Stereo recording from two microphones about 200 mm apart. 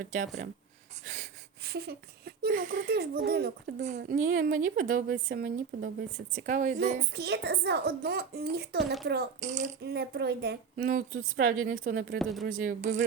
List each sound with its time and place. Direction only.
0.0 s speech: 40° right (ahead or behind)
3.8 s a woman's voice: 35° right (ahead or behind)
7.1 s a woman's voice: 55° right (ahead or behind)
9.4 s speech: 35° right (ahead or behind)
9.8 s a woman's voice: 55° right (ahead or behind)
12.2 s speech: centre (ahead or behind)
12.5 s speech: 40° right (ahead or behind)